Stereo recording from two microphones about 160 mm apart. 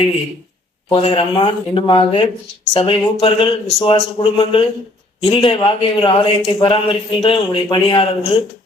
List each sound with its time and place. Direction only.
0.9 s a man's voice: 35° left (ahead or behind)